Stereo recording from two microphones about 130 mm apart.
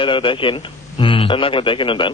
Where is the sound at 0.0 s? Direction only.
40° left (ahead or behind).